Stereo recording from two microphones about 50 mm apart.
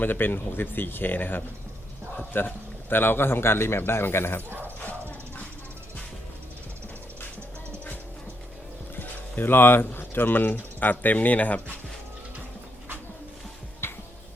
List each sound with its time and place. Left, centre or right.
0.0 s a man's voice: left
4.4 s speech: right
4.8 s dog: left
9.0 s speech: left
13.8 s music: left